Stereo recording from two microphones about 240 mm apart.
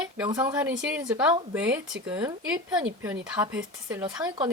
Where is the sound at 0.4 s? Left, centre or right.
Centre.